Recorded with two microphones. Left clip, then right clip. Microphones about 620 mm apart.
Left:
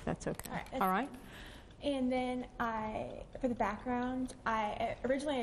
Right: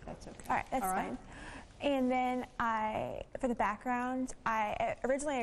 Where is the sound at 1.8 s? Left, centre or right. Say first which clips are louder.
Right 3 dB; right.